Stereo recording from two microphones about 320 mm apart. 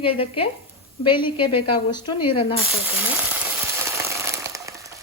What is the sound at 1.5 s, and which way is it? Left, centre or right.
Speech, left.